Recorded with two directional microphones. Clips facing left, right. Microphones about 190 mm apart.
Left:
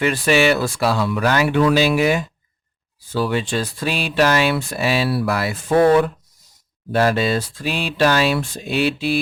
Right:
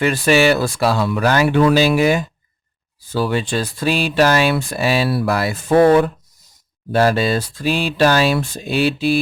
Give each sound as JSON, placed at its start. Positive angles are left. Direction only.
{"t": 0.0, "sound": "speech", "side_deg": -40}